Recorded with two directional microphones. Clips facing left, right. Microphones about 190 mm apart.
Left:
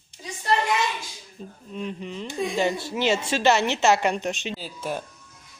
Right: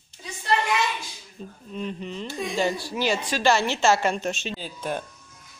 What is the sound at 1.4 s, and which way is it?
Speech, 10° left (ahead or behind).